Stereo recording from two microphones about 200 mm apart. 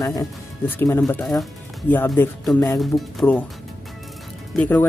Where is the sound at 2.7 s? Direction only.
Centre (ahead or behind).